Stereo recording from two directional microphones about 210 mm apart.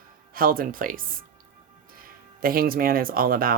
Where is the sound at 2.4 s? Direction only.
45° right (ahead or behind).